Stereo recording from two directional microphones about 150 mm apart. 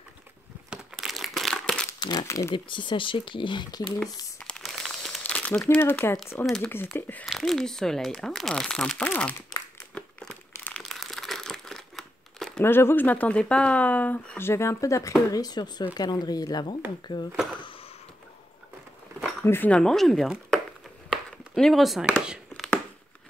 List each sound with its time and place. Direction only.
0.7 s crumpling: centre (ahead or behind)
2.0 s speech: 25° left (ahead or behind)
2.5 s speech: 30° left (ahead or behind)
4.0 s crumpling: 5° left (ahead or behind)
6.4 s speech: 5° left (ahead or behind)
6.7 s speech: 15° left (ahead or behind)
9.9 s crumpling: 10° left (ahead or behind)
12.6 s speech: 15° left (ahead or behind); by 17.2 s 30° left (ahead or behind)
19.4 s speech: 15° left (ahead or behind)
21.1 s a sound: centre (ahead or behind)